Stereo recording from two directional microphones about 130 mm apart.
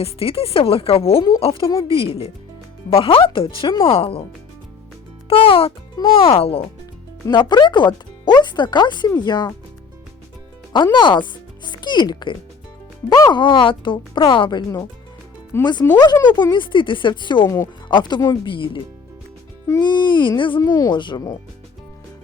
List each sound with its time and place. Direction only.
0.0 s speech: 45° left (ahead or behind)
5.3 s speech: 45° left (ahead or behind)
7.3 s speech: 35° left (ahead or behind)
10.9 s speech: 35° left (ahead or behind)
15.6 s speech: 35° left (ahead or behind)
19.8 s speech: 35° left (ahead or behind)